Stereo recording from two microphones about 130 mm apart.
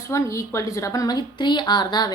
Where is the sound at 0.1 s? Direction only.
25° left (ahead or behind).